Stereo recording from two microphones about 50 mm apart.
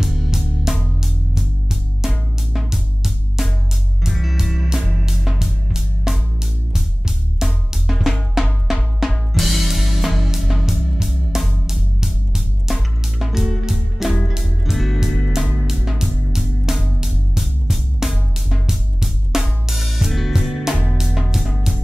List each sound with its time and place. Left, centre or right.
0.4 s music: centre
7.7 s drum: centre
11.1 s music: centre
20.7 s music: centre